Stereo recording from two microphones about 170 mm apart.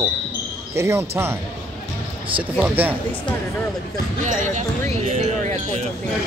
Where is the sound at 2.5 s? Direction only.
10° right (ahead or behind).